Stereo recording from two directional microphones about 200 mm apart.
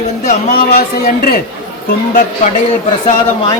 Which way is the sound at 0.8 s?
50° left (ahead or behind).